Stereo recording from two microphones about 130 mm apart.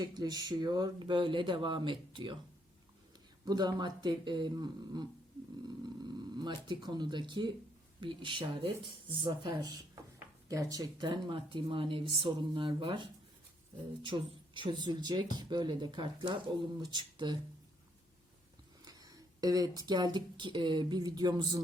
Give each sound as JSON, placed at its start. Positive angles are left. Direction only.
{"t": 0.0, "sound": "speech", "side_deg": -30}
{"t": 3.4, "sound": "speech", "side_deg": -30}
{"t": 18.9, "sound": "a sound", "side_deg": -30}
{"t": 20.1, "sound": "speech", "side_deg": -35}